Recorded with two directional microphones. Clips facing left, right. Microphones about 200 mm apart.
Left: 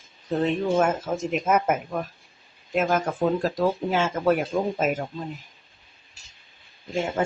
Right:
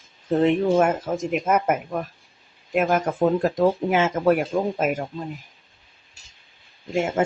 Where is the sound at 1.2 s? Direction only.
5° right (ahead or behind).